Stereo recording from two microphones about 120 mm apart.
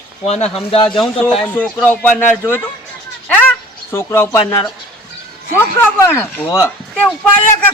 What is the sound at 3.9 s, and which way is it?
Speech, 20° left (ahead or behind).